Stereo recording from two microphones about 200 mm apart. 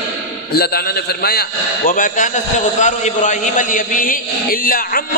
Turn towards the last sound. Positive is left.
turn(degrees=45)  # may be behind; listen again after turning